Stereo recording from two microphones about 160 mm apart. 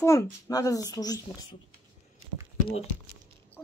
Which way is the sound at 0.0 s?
20° left (ahead or behind).